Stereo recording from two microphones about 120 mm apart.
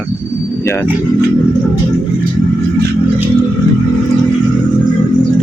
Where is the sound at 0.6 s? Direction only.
20° left (ahead or behind).